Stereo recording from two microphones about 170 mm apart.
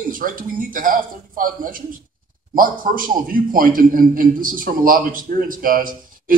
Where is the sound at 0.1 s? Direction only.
55° right (ahead or behind).